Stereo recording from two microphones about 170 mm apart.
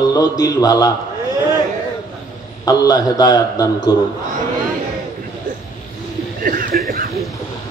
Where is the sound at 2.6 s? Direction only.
25° left (ahead or behind).